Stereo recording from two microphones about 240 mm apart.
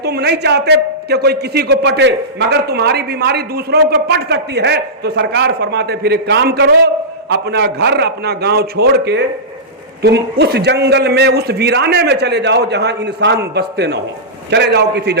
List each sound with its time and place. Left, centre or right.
0.0 s a man's voice: right